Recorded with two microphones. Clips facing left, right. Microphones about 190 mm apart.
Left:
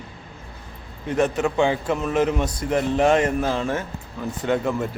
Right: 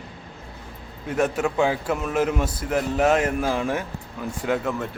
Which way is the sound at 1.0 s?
5° right (ahead or behind).